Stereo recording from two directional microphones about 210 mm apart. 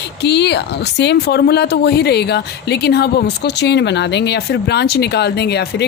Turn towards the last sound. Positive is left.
turn(degrees=50)  # may be behind; listen again after turning